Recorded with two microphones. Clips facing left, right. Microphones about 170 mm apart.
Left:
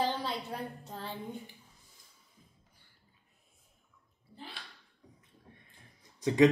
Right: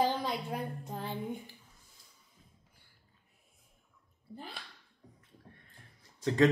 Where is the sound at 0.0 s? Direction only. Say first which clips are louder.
Right 2 dB; 15° right (ahead or behind).